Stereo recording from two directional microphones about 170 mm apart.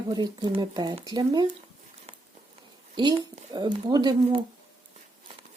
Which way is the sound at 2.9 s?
25° right (ahead or behind).